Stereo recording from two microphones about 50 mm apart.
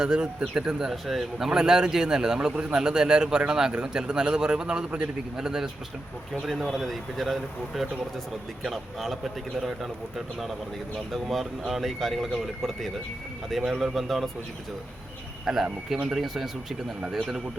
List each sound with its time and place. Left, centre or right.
0.0 s a man's voice: centre
6.7 s speech: centre
13.5 s speech: centre
15.5 s a man's voice: centre